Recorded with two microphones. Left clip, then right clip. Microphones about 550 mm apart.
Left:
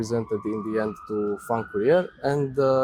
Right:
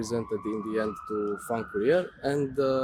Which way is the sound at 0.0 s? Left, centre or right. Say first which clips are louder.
Left 4 dB; left.